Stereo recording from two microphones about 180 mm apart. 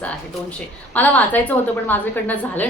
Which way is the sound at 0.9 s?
10° left (ahead or behind).